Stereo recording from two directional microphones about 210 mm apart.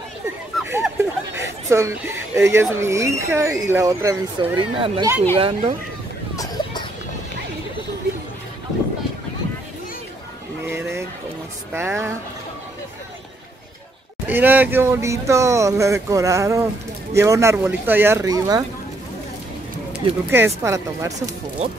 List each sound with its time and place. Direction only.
0.7 s speech: 10° right (ahead or behind); by 5.8 s 25° right (ahead or behind)
6.3 s a sound: 15° left (ahead or behind)
10.7 s boat: 10° right (ahead or behind)
11.7 s speech: 10° right (ahead or behind)
14.2 s speech: 10° right (ahead or behind)
19.9 s speech: 10° right (ahead or behind)